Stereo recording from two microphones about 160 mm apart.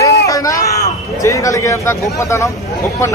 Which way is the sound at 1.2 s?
20° left (ahead or behind).